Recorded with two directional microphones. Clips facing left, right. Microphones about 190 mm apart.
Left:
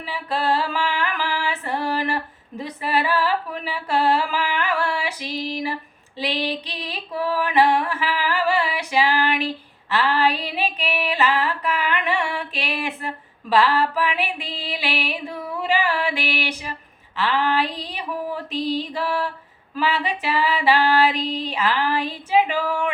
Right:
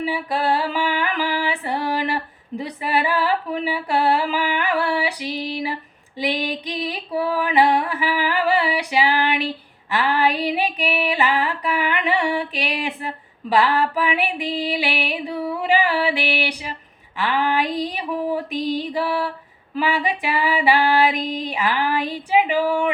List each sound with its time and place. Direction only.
0.0 s female singing: 15° right (ahead or behind)